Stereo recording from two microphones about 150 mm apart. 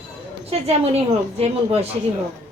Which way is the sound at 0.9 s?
45° right (ahead or behind).